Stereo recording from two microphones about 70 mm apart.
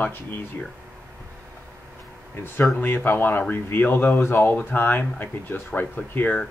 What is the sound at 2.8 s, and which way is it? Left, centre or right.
Speech, left.